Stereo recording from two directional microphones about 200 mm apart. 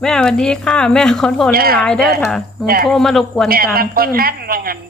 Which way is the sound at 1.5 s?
50° right (ahead or behind).